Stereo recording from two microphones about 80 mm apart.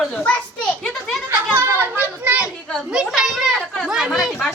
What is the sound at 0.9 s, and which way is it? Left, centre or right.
Children playing, centre.